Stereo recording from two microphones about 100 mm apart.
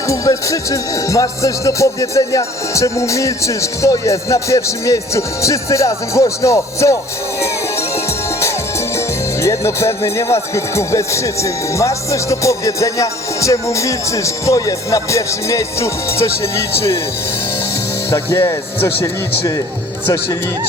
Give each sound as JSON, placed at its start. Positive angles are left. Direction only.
{"t": 0.1, "sound": "speech", "side_deg": 35}
{"t": 7.4, "sound": "music", "side_deg": 30}
{"t": 9.0, "sound": "speech", "side_deg": 30}
{"t": 18.4, "sound": "speech", "side_deg": 30}